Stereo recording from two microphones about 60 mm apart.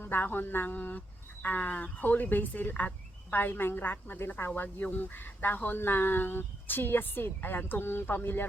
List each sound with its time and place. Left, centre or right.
0.0 s speech: left